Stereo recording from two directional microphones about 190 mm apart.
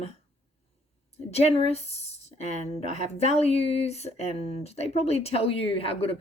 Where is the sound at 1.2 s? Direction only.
30° left (ahead or behind).